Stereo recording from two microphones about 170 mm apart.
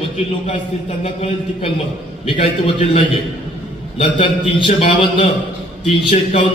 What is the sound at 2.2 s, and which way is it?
A man's voice, 30° left (ahead or behind).